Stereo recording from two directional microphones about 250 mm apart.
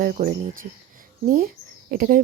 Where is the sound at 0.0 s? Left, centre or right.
Right.